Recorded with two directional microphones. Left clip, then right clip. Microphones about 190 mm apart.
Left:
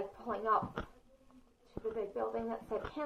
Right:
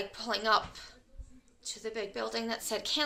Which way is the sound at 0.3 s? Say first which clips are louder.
Right 5 dB; 25° right (ahead or behind).